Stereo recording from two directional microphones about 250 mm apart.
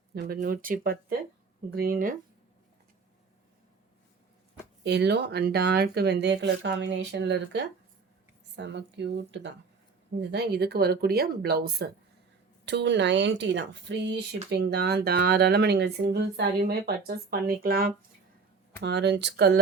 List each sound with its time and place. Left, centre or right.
0.1 s speech: right
4.8 s speech: right